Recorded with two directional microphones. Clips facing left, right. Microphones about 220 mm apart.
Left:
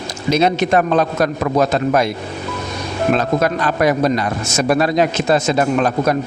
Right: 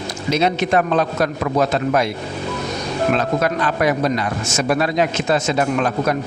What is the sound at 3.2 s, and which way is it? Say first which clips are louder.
A man's voice: left 2 dB; 40° left (ahead or behind).